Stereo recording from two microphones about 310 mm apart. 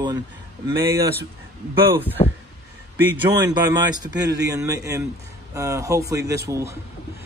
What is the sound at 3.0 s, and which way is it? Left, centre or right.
A man's voice, centre.